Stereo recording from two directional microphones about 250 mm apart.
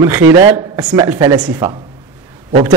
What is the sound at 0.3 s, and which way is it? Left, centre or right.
Speech, centre.